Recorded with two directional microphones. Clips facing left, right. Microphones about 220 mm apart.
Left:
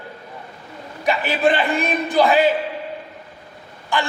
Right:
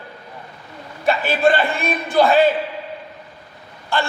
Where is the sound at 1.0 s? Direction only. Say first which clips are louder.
Right 2 dB; 15° left (ahead or behind).